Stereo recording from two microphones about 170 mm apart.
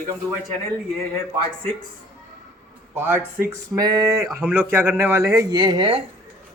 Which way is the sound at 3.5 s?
20° right (ahead or behind).